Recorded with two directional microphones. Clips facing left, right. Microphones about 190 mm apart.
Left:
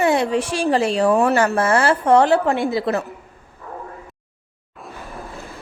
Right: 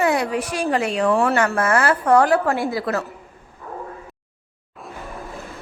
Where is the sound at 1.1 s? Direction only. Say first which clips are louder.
Left 2 dB; 20° left (ahead or behind).